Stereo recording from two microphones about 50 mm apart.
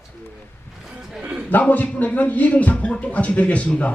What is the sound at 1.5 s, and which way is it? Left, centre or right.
Speech, left.